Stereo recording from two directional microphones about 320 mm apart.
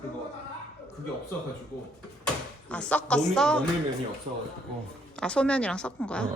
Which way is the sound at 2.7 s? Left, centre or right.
Centre.